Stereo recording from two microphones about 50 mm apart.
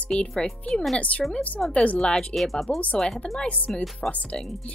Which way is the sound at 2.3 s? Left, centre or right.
Centre.